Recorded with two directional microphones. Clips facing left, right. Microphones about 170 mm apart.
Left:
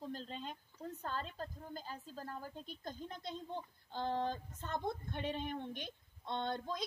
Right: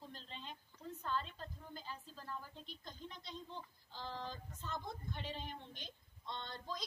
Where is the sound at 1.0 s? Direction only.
45° left (ahead or behind).